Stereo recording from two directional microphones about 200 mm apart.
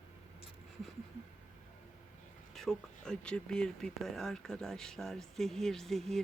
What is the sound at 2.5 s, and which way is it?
Speech, centre (ahead or behind).